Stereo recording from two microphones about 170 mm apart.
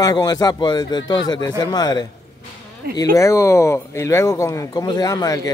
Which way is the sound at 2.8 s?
65° right (ahead or behind).